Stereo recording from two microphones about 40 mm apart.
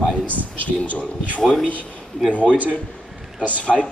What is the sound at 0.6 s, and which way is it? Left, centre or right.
Speech, left.